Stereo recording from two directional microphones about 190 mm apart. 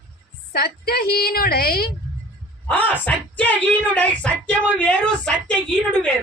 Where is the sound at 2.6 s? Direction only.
10° left (ahead or behind).